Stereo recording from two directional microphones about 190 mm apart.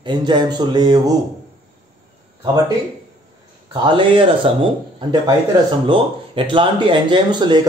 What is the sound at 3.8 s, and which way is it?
A man's voice, 25° right (ahead or behind).